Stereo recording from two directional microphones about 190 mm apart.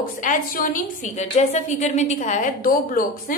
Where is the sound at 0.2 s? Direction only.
45° left (ahead or behind).